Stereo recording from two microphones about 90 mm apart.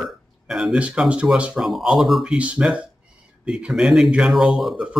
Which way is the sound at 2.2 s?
15° right (ahead or behind).